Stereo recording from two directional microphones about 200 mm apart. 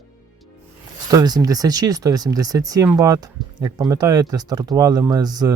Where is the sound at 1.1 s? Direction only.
20° right (ahead or behind).